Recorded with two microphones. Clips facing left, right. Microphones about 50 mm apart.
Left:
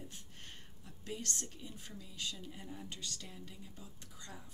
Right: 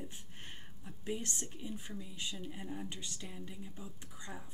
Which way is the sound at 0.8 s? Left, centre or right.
Right.